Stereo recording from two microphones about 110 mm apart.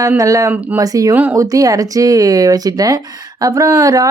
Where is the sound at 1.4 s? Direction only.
30° right (ahead or behind).